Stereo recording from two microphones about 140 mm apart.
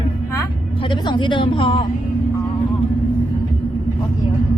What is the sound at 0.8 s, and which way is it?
A woman's voice, 35° left (ahead or behind).